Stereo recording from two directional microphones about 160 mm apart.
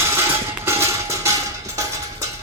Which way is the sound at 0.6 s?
20° right (ahead or behind).